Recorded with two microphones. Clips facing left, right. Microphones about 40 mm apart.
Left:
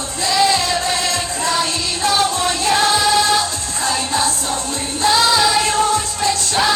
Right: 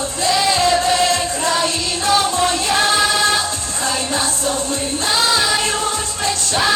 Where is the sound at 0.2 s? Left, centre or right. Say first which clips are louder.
Even; right.